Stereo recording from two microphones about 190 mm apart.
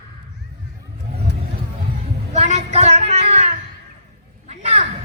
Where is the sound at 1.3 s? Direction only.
60° left (ahead or behind).